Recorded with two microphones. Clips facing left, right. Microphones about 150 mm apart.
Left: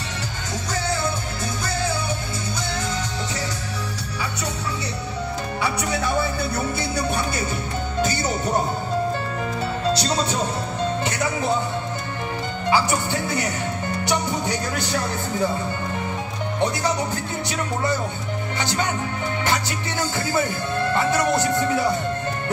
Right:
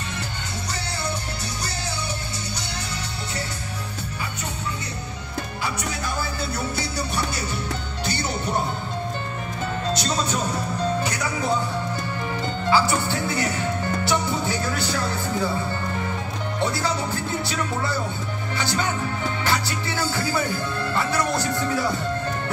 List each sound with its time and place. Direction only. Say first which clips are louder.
5.6 s music: left 6 dB; 65° left (ahead or behind)
8.0 s music: left 5 dB; 45° left (ahead or behind)
9.9 s music: left 2 dB; 30° left (ahead or behind)
12.6 s music: even; 15° left (ahead or behind)
16.5 s music: left 2 dB; 20° left (ahead or behind)
18.6 s music: even; 20° left (ahead or behind)